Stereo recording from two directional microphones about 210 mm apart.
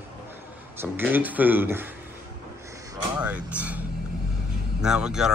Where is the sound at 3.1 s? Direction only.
5° right (ahead or behind).